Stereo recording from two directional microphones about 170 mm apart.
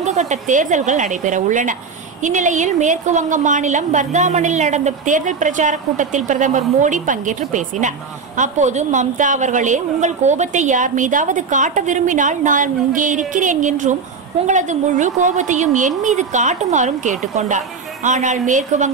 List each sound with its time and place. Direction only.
0.0 s a woman's voice: 40° right (ahead or behind)